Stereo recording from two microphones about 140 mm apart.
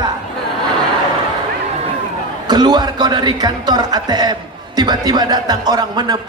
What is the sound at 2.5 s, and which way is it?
A man's voice, 30° right (ahead or behind).